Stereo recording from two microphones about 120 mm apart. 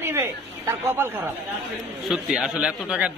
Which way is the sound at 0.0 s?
20° right (ahead or behind).